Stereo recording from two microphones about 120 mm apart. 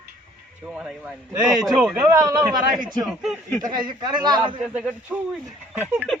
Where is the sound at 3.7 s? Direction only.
40° right (ahead or behind).